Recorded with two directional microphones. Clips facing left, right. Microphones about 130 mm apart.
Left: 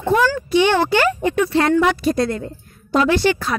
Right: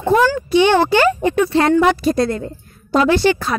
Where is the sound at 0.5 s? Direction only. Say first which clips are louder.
Right 3 dB; 30° right (ahead or behind).